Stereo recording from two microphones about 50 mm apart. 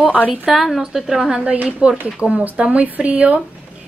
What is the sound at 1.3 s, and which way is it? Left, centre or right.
A woman's voice, right.